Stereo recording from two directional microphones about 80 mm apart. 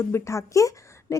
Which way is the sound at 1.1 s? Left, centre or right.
Left.